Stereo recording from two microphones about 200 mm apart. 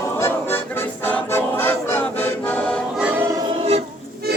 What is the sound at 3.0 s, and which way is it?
Music, 10° right (ahead or behind).